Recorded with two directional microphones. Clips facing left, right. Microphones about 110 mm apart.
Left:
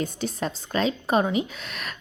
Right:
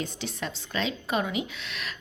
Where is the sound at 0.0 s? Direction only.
45° left (ahead or behind).